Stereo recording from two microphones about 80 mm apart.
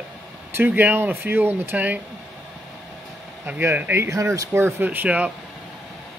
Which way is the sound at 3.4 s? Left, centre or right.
Right.